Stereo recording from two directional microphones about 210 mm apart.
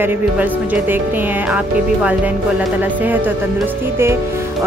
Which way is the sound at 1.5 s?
5° right (ahead or behind).